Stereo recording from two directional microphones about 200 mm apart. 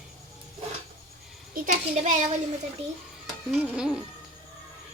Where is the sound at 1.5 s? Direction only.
40° right (ahead or behind).